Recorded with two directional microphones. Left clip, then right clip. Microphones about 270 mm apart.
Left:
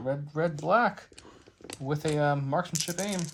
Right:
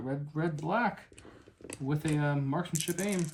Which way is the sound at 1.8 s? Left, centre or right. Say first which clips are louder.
Left 6 dB; centre.